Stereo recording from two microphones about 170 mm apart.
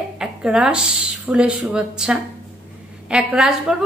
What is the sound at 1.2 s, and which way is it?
A woman's voice, 5° right (ahead or behind).